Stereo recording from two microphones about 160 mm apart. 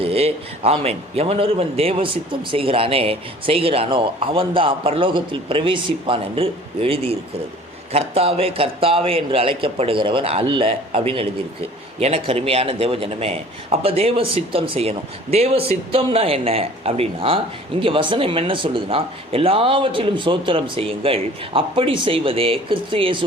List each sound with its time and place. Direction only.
0.0 s speech: 40° right (ahead or behind)